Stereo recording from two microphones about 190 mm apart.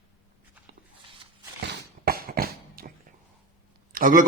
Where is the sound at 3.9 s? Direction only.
45° right (ahead or behind).